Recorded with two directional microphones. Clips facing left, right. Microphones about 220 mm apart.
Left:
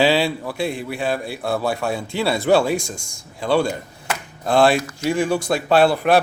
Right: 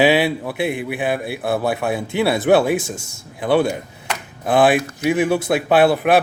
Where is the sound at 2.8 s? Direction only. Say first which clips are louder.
Right 3 dB; 5° right (ahead or behind).